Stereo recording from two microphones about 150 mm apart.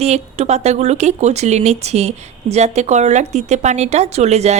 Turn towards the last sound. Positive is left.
turn(degrees=-45)  # may be behind; listen again after turning